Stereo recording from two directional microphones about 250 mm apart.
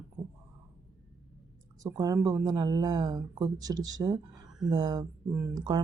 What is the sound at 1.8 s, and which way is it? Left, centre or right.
Speech, centre.